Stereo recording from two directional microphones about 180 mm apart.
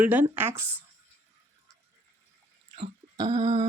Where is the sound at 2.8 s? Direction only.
25° right (ahead or behind).